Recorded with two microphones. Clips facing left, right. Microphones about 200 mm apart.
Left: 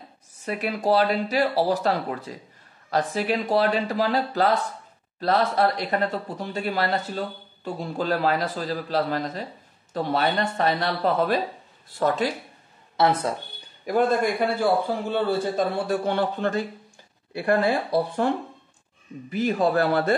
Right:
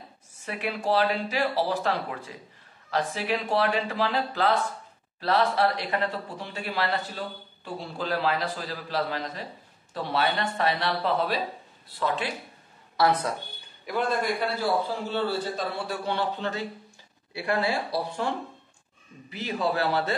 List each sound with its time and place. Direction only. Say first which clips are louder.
0.5 s speech: left 4 dB; 40° left (ahead or behind)
12.9 s speech: left 2 dB; 25° left (ahead or behind)
13.8 s speech: left 6 dB; 45° left (ahead or behind)
19.3 s speech: left 6 dB; 50° left (ahead or behind)